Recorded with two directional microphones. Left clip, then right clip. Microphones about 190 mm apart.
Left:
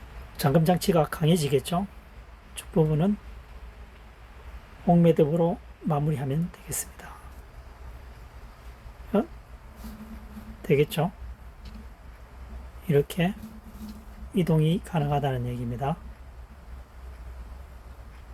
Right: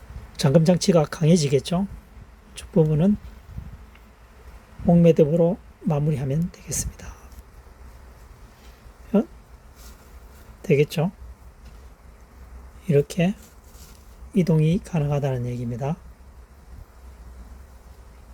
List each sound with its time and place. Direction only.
0.3 s speech: 40° right (ahead or behind)
5.0 s speech: 30° right (ahead or behind)
10.6 s speech: 30° right (ahead or behind)
12.9 s speech: 30° right (ahead or behind)
14.3 s speech: 30° right (ahead or behind)